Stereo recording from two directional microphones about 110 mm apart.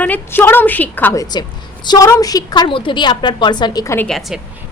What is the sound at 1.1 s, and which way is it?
A woman's voice, 35° left (ahead or behind).